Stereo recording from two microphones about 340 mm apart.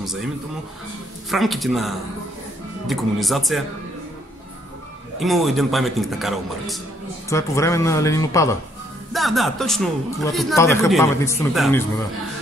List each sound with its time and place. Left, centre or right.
0.0 s speech: centre
1.3 s a man's voice: centre
5.2 s a man's voice: centre